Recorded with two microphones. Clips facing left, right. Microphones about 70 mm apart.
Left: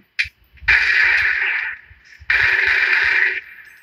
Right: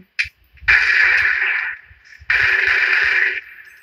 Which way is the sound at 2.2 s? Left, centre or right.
Left.